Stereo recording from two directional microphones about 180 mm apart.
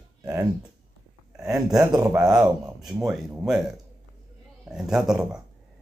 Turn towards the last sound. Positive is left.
turn(degrees=-5)  # may be behind; listen again after turning